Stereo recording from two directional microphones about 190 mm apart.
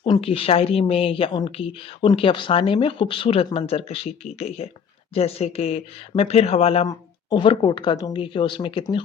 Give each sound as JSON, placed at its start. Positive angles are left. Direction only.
{"t": 0.0, "sound": "speech", "side_deg": 30}